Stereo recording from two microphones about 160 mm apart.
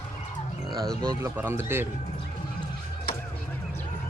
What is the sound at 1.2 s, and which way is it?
Speech, 15° right (ahead or behind).